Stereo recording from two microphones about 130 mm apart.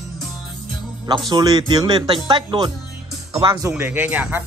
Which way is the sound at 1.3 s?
30° right (ahead or behind).